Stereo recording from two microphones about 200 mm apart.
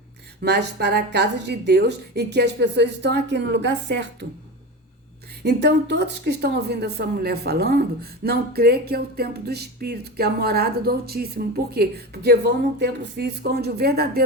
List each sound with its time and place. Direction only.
0.4 s speech: 55° right (ahead or behind)
5.4 s speech: 55° right (ahead or behind)